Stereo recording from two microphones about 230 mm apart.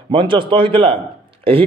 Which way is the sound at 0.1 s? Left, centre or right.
Right.